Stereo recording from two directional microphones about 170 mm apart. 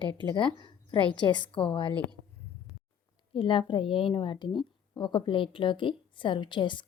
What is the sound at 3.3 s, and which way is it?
A woman's voice, 30° left (ahead or behind).